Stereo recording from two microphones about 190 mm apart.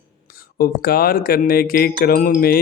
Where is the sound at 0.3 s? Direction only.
50° left (ahead or behind).